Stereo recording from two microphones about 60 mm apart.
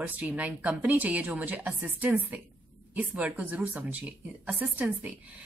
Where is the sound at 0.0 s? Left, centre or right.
Right.